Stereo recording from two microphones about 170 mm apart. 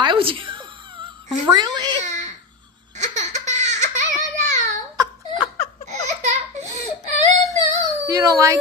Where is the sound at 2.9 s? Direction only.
45° right (ahead or behind).